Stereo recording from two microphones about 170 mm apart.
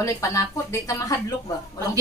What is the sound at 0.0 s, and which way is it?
Speech, 15° left (ahead or behind).